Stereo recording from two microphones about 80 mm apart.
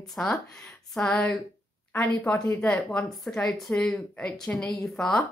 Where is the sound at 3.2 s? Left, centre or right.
Centre.